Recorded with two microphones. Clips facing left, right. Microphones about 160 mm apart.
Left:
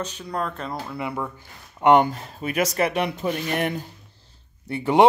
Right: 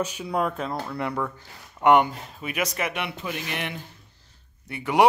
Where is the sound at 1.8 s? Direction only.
30° left (ahead or behind).